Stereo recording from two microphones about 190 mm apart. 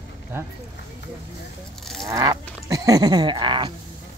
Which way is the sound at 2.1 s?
15° right (ahead or behind).